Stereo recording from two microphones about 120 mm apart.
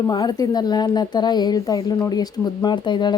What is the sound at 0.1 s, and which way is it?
A woman's voice, 35° left (ahead or behind).